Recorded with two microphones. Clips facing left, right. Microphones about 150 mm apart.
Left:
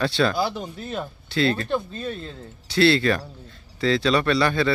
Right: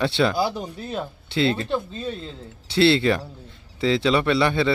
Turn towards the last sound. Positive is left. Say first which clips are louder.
# right 1 dB
turn(degrees=-20)  # may be behind; listen again after turning